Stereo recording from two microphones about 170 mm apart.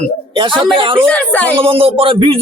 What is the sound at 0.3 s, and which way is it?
Speech, 30° right (ahead or behind).